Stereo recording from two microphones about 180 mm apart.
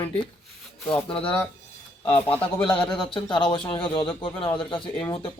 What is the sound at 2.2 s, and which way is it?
Speech, 5° left (ahead or behind).